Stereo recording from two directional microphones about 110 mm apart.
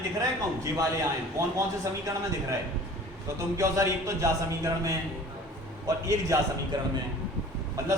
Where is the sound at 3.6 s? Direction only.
30° right (ahead or behind).